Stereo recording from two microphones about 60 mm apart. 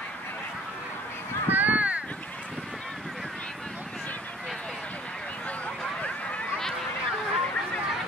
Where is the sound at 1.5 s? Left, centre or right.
Right.